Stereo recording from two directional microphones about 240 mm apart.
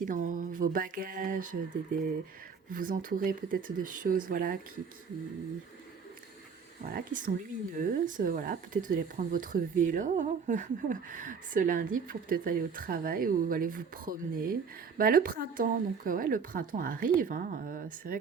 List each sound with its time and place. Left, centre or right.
0.0 s speech: right
6.8 s speech: right